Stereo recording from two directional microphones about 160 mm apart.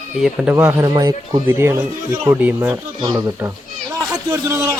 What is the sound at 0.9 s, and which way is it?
Speech, 25° right (ahead or behind).